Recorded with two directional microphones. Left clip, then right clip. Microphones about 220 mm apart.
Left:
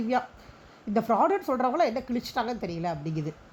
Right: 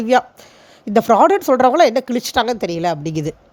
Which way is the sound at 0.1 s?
50° right (ahead or behind).